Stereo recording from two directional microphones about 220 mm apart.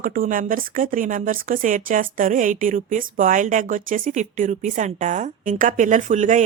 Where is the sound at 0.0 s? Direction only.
40° right (ahead or behind).